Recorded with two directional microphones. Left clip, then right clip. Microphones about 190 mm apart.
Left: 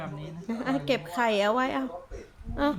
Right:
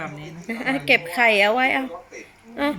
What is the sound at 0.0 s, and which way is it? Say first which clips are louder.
A woman's voice: right 6 dB; 10° left (ahead or behind).